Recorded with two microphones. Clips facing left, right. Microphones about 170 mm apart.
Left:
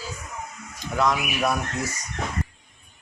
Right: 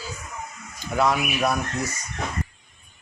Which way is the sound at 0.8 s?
5° right (ahead or behind).